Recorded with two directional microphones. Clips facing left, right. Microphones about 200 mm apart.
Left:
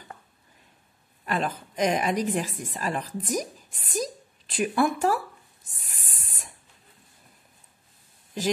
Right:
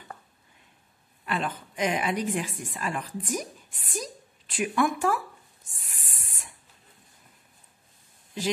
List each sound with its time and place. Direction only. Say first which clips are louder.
1.2 s speech: left 2 dB; 40° left (ahead or behind)
5.7 s spray: left 2 dB; 40° left (ahead or behind)